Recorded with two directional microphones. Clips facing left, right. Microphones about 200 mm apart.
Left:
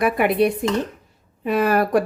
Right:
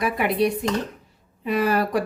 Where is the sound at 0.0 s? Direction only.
55° left (ahead or behind).